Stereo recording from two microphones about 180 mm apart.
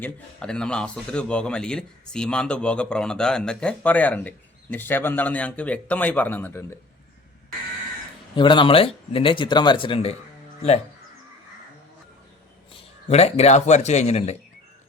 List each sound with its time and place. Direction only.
0.0 s speech: 5° left (ahead or behind)
8.4 s speech: 25° left (ahead or behind)
13.1 s a man's voice: 35° left (ahead or behind)